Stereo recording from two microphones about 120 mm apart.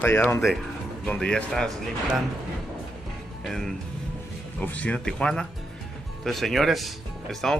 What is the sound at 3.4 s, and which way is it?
Speech, centre (ahead or behind).